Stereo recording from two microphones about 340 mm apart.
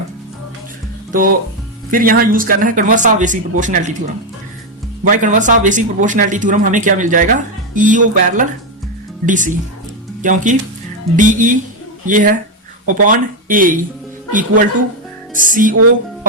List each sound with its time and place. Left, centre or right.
1.1 s speech: right
5.0 s speech: right
15.3 s music: right